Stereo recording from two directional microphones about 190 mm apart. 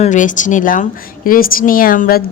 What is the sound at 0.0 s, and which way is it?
A woman's voice, 40° left (ahead or behind).